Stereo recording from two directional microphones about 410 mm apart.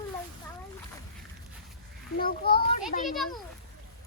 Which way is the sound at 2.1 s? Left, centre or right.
Left.